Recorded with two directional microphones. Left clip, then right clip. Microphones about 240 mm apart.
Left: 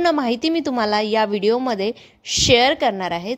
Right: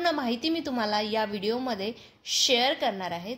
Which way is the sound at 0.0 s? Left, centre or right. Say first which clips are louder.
Left 9 dB; left.